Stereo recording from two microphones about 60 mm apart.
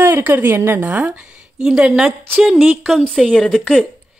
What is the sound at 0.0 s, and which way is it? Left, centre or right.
A woman's voice, right.